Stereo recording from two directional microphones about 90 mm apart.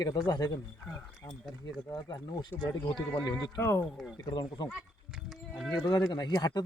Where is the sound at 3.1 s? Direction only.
45° left (ahead or behind).